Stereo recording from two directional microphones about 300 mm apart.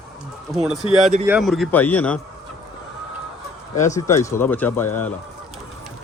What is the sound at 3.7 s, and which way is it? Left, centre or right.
Speech, left.